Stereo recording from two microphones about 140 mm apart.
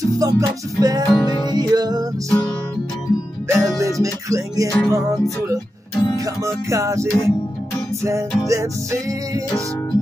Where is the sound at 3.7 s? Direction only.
20° right (ahead or behind).